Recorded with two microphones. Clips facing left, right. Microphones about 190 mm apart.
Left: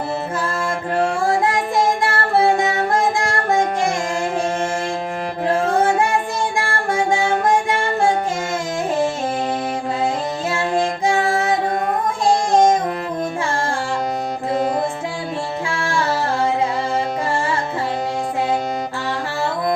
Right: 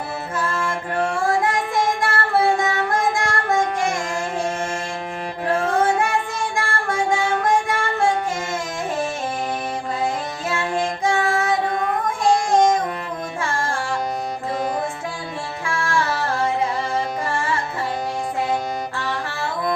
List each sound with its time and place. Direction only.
1.4 s music: 30° left (ahead or behind)
10.5 s music: 35° left (ahead or behind)
12.2 s child singing: 30° left (ahead or behind)